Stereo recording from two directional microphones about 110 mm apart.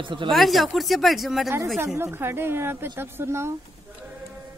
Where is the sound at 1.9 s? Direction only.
20° right (ahead or behind).